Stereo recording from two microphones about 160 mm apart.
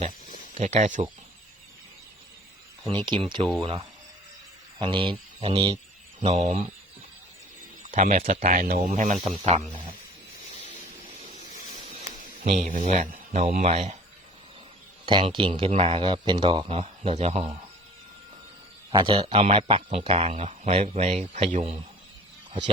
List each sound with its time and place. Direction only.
0.5 s speech: 45° right (ahead or behind)
2.8 s speech: 5° left (ahead or behind)
3.1 s a man's voice: 30° right (ahead or behind); by 6.7 s 45° right (ahead or behind)
7.9 s speech: 55° right (ahead or behind)
12.5 s speech: 50° right (ahead or behind)
15.0 s a man's voice: 30° right (ahead or behind)
18.9 s a man's voice: 30° right (ahead or behind)